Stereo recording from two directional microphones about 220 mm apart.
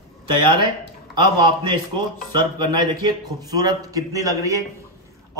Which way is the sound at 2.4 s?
20° right (ahead or behind).